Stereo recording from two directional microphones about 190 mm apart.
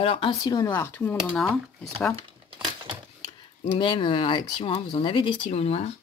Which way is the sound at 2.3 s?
25° right (ahead or behind).